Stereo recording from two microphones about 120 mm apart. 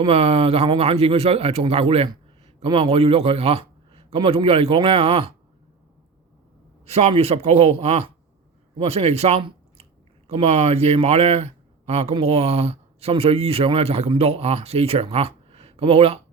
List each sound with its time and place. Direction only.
0.0 s a man's voice: 55° right (ahead or behind)
6.8 s speech: 60° right (ahead or behind)